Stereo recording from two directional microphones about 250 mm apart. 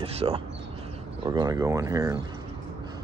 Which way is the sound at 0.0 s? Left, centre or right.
Right.